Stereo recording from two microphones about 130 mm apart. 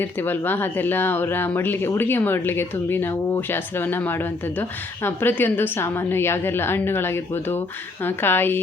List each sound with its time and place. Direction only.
0.0 s speech: 15° left (ahead or behind)